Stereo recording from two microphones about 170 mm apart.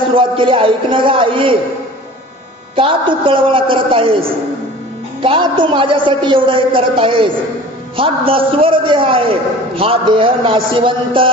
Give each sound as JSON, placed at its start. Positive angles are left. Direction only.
{"t": 0.1, "sound": "a man's voice", "side_deg": -30}
{"t": 2.7, "sound": "a man's voice", "side_deg": -30}